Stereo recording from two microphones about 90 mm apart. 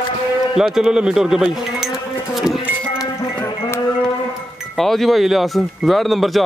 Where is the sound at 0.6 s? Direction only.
5° right (ahead or behind).